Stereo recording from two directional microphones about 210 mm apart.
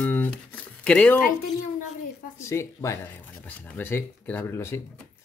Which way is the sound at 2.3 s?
15° left (ahead or behind).